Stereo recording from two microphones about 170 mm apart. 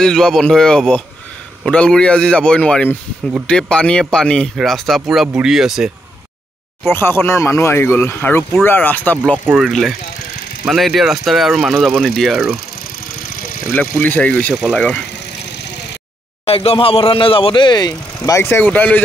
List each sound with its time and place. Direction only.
0.0 s speech: 5° left (ahead or behind)
6.9 s speech: 15° left (ahead or behind)
13.7 s speech: 10° left (ahead or behind)
16.4 s speech: 35° left (ahead or behind); by 18.9 s 10° left (ahead or behind)